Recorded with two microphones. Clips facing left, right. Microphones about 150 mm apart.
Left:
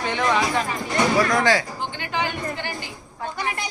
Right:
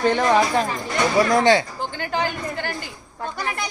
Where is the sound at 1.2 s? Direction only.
30° right (ahead or behind).